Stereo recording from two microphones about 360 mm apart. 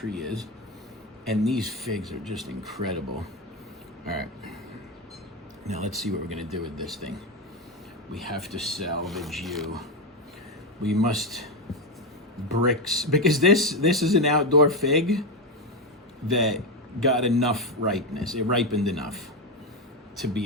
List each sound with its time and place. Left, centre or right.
0.0 s speech: centre
5.6 s speech: centre
5.9 s speech: centre
10.8 s speech: centre